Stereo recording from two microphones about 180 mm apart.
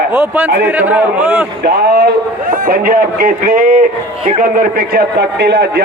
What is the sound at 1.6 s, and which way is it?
Speech, 65° right (ahead or behind).